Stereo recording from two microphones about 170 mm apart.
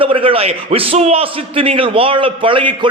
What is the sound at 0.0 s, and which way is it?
A man's voice, 30° right (ahead or behind).